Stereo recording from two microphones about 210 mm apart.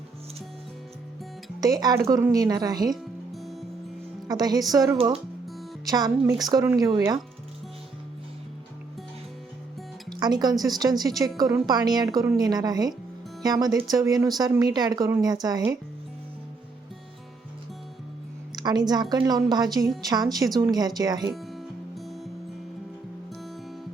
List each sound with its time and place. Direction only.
1.6 s speech: 20° right (ahead or behind)
2.9 s music: centre (ahead or behind)
4.3 s speech: 20° right (ahead or behind)
10.1 s music: 20° right (ahead or behind)
10.6 s speech: 20° right (ahead or behind)
18.5 s a woman's voice: 20° right (ahead or behind)
21.9 s music: centre (ahead or behind)